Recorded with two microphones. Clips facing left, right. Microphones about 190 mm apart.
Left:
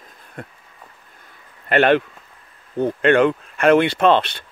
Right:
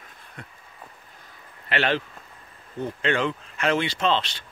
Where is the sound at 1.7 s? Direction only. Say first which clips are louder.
Left 9 dB; 55° left (ahead or behind).